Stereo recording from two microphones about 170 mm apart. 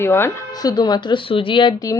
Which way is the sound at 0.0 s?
15° left (ahead or behind).